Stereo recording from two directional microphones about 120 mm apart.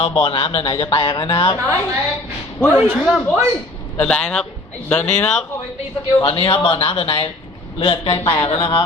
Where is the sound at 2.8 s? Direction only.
10° right (ahead or behind).